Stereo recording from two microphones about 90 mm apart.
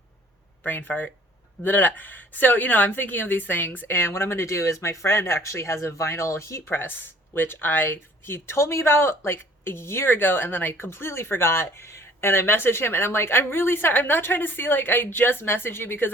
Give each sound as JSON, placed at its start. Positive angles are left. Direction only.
{"t": 0.6, "sound": "speech", "side_deg": 20}